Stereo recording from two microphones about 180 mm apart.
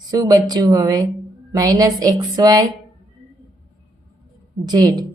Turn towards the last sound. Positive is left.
turn(degrees=-20)  # may be behind; listen again after turning